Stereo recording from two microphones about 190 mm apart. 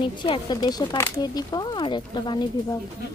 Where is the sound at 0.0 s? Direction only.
25° left (ahead or behind).